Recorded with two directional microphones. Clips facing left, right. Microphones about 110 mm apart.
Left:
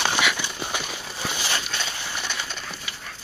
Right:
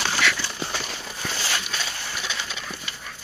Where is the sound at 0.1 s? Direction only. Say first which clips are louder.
Even; 15° left (ahead or behind).